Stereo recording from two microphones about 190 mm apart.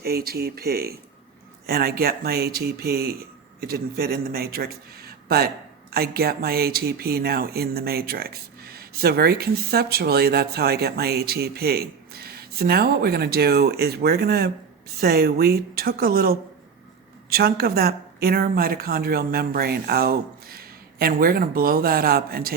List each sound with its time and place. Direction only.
0.0 s speech: 55° right (ahead or behind)